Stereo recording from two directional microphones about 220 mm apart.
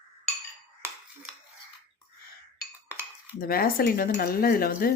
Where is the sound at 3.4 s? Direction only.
40° left (ahead or behind).